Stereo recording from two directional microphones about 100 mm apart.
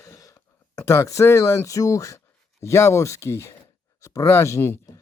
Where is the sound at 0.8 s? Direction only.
30° left (ahead or behind).